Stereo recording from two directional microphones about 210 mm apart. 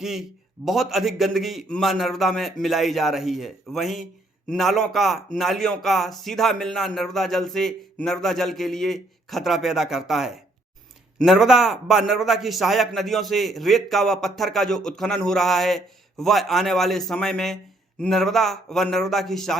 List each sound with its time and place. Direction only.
0.0 s a man's voice: centre (ahead or behind)